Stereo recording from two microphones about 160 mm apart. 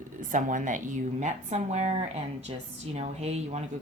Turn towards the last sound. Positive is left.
turn(degrees=-45)  # may be behind; listen again after turning